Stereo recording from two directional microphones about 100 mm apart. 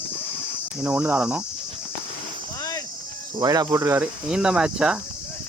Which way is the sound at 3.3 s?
40° right (ahead or behind).